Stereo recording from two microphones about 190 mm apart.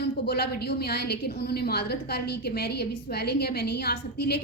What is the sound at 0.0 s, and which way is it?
A woman's voice, 60° left (ahead or behind).